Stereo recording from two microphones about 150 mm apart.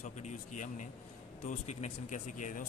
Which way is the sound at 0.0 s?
50° left (ahead or behind).